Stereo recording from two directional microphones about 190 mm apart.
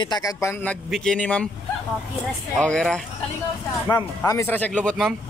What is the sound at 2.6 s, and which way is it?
Speech, 5° left (ahead or behind).